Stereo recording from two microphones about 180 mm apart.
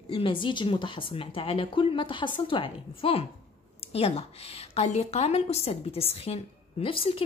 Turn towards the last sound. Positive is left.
turn(degrees=30)  # may be behind; listen again after turning